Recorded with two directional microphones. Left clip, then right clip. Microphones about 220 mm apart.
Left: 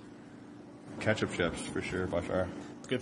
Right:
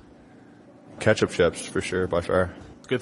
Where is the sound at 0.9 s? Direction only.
50° right (ahead or behind).